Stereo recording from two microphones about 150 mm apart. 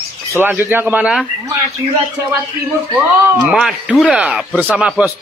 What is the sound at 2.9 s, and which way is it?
Speech, 5° right (ahead or behind).